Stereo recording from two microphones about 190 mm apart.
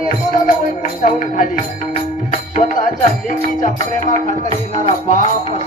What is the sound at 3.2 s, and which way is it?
Music, 45° left (ahead or behind).